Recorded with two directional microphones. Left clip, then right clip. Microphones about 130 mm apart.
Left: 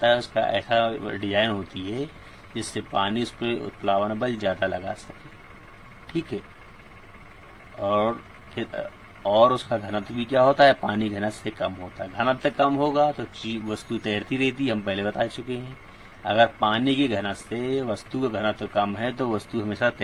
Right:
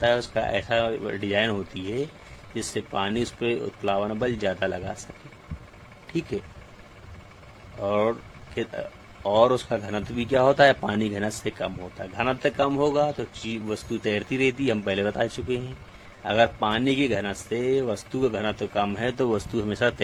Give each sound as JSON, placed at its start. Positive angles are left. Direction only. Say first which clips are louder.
{"t": 0.0, "sound": "a man's voice", "louder": "left 2 dB", "side_deg": -40}
{"t": 7.8, "sound": "speech", "louder": "left 1 dB", "side_deg": -40}
{"t": 9.2, "sound": "a man's voice", "louder": "left 1 dB", "side_deg": -50}